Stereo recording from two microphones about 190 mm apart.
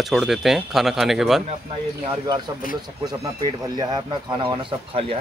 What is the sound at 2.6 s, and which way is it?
Speech, 45° left (ahead or behind).